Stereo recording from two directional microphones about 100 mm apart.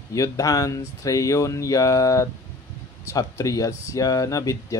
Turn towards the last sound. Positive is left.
turn(degrees=35)  # may be behind; listen again after turning